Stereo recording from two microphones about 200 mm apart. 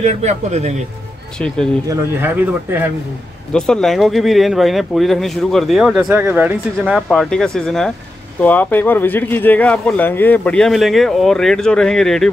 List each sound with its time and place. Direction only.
0.0 s speech: 35° right (ahead or behind)
1.9 s speech: 10° right (ahead or behind)
3.5 s speech: 5° left (ahead or behind)